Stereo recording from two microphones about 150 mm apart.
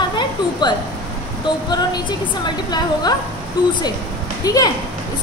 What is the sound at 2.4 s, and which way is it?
Speech, 30° left (ahead or behind).